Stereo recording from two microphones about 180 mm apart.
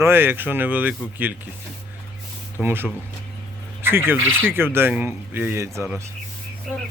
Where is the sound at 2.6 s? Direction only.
10° right (ahead or behind).